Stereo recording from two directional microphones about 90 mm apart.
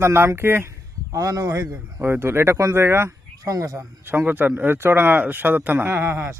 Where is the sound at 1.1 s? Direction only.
40° right (ahead or behind).